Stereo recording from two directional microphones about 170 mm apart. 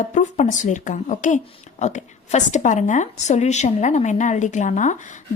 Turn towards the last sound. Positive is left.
turn(degrees=45)  # may be behind; listen again after turning